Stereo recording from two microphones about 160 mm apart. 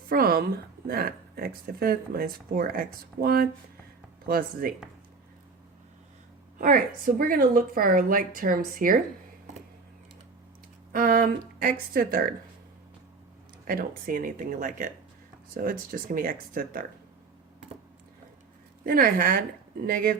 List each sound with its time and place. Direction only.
0.1 s a woman's voice: 70° right (ahead or behind)
6.6 s a woman's voice: 60° right (ahead or behind)
10.9 s a woman's voice: 60° right (ahead or behind)
13.7 s a woman's voice: 65° right (ahead or behind)
18.9 s a woman's voice: 65° right (ahead or behind)